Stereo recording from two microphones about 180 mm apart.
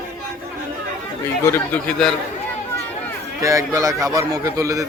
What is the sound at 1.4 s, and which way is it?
Speech, 10° left (ahead or behind).